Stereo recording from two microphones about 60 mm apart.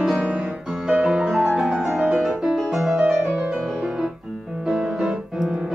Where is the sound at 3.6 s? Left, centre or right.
Centre.